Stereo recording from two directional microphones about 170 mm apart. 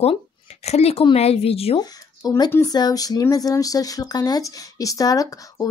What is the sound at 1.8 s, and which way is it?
Speech, 20° left (ahead or behind).